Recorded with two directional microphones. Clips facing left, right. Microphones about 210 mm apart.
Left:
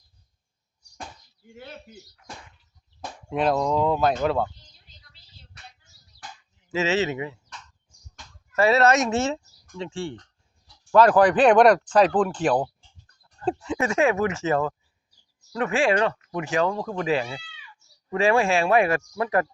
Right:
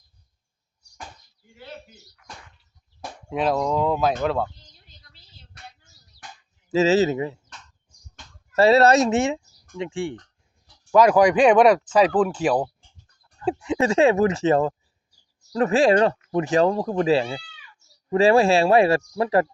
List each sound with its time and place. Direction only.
3.2 s speech: centre (ahead or behind)
6.7 s speech: 35° right (ahead or behind)
8.5 s speech: 35° right (ahead or behind)
9.0 s speech: 15° right (ahead or behind)
13.7 s speech: 25° right (ahead or behind)